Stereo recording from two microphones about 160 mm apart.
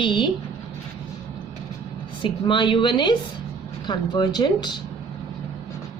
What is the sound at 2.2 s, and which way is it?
Speech, 30° left (ahead or behind).